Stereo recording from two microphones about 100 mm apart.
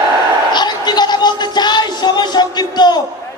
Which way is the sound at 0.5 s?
45° left (ahead or behind).